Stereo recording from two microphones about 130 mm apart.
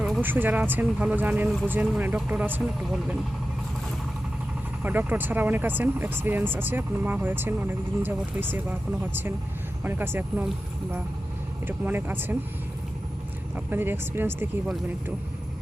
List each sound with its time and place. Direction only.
0.2 s speech: 15° right (ahead or behind)
4.8 s speech: 15° right (ahead or behind)
11.6 s speech: 15° right (ahead or behind)
13.7 s speech: 15° right (ahead or behind)